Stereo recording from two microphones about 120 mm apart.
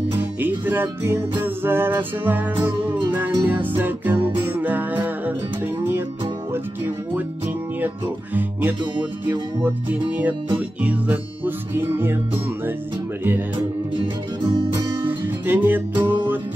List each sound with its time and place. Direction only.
0.2 s music: 15° right (ahead or behind)
8.4 s music: 15° right (ahead or behind)
15.0 s music: 15° right (ahead or behind)